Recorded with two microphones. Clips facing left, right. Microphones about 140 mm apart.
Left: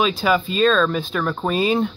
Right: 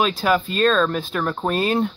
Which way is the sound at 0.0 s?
5° right (ahead or behind).